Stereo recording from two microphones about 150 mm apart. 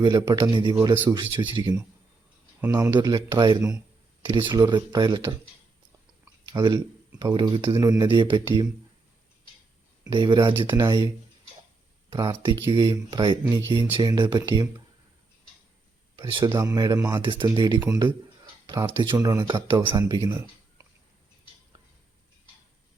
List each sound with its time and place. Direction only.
0.0 s speech: 30° right (ahead or behind)
2.6 s speech: 15° right (ahead or behind)
6.5 s speech: 25° right (ahead or behind)
10.1 s speech: 30° right (ahead or behind)
12.1 s speech: 30° right (ahead or behind)
16.5 s speech: 25° right (ahead or behind)
17.7 s speech: 10° right (ahead or behind)
18.6 s speech: 25° right (ahead or behind)
19.5 s speech: 30° right (ahead or behind)